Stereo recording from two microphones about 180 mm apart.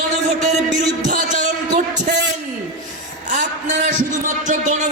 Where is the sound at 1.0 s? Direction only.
45° right (ahead or behind).